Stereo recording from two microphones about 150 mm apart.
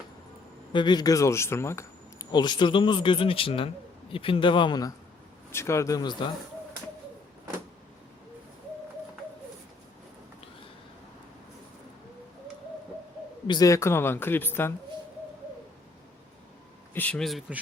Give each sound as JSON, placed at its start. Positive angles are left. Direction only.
{"t": 0.7, "sound": "speech", "side_deg": 30}
{"t": 5.5, "sound": "speech", "side_deg": 15}
{"t": 13.5, "sound": "speech", "side_deg": 25}
{"t": 16.9, "sound": "speech", "side_deg": 10}